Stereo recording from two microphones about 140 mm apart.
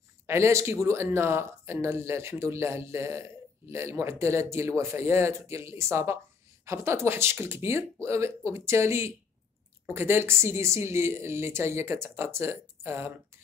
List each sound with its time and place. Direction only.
0.3 s a woman's voice: 20° right (ahead or behind)